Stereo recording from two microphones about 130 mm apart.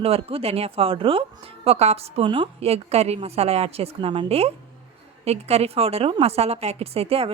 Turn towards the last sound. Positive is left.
turn(degrees=-50)  # may be behind; listen again after turning